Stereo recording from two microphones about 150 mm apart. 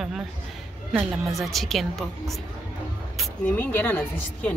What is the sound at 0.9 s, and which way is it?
A woman's voice, centre (ahead or behind).